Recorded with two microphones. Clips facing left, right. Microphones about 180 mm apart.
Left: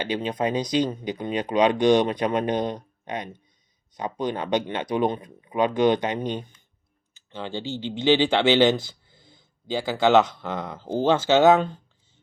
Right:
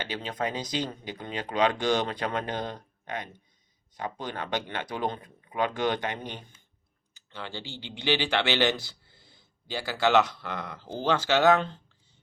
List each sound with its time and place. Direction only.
0.1 s speech: 20° left (ahead or behind)